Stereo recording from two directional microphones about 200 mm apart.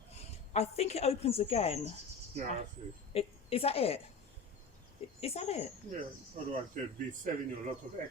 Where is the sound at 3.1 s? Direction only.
30° left (ahead or behind).